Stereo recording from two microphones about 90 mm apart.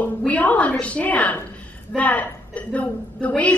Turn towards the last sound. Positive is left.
turn(degrees=15)  # may be behind; listen again after turning